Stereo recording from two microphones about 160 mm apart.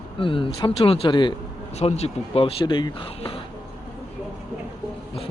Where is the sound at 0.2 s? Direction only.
35° left (ahead or behind).